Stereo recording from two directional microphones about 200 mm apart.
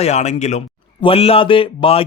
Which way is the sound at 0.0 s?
35° left (ahead or behind).